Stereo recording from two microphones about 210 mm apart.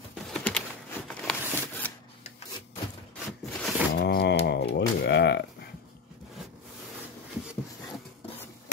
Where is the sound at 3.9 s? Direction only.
50° left (ahead or behind).